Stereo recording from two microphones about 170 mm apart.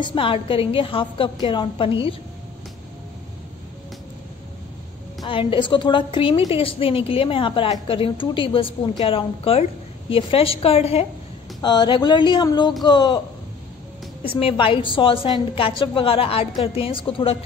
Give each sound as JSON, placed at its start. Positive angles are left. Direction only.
{"t": 0.0, "sound": "a woman's voice", "side_deg": 30}
{"t": 5.2, "sound": "a woman's voice", "side_deg": 30}
{"t": 11.6, "sound": "speech", "side_deg": 25}
{"t": 14.3, "sound": "a woman's voice", "side_deg": 30}